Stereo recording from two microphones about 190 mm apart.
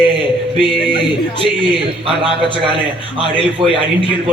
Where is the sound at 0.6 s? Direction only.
5° left (ahead or behind).